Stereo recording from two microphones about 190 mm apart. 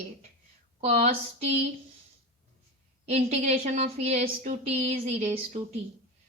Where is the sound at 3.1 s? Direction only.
35° right (ahead or behind).